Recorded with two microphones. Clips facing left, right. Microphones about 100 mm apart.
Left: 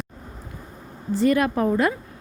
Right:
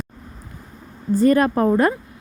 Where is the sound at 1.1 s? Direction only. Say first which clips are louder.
Right 4 dB; 40° right (ahead or behind).